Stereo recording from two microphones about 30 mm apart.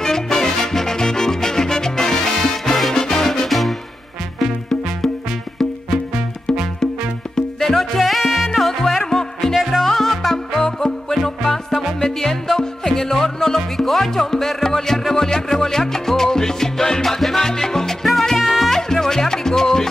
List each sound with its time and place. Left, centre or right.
0.0 s music: centre
3.4 s music: centre
7.6 s music: centre
8.5 s music: centre
9.0 s music: centre
9.5 s music: centre
9.8 s music: centre
17.4 s salsa music: centre
18.4 s music: centre
18.7 s music: centre